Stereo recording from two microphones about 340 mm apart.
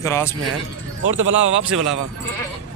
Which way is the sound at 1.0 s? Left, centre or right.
Right.